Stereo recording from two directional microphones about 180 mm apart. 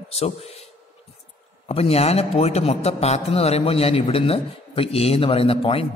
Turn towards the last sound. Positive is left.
turn(degrees=30)  # may be behind; listen again after turning